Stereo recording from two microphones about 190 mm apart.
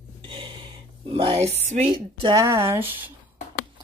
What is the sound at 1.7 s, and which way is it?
Speech, 35° right (ahead or behind).